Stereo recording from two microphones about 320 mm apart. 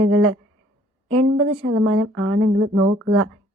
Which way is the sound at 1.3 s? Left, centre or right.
Right.